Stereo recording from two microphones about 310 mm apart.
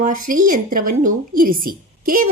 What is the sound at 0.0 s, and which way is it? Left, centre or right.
A woman's voice, right.